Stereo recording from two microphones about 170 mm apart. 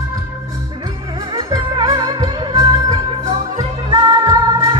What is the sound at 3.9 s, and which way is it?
Music, 25° right (ahead or behind).